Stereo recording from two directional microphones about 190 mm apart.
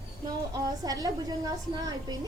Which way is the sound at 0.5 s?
20° right (ahead or behind).